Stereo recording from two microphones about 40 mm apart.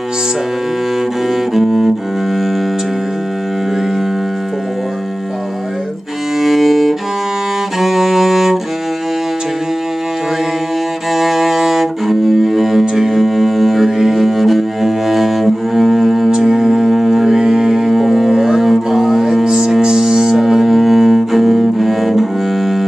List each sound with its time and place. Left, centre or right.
1.5 s cello: centre
6.4 s cello: centre
7.8 s music: centre
11.1 s music: centre
19.8 s double bass: centre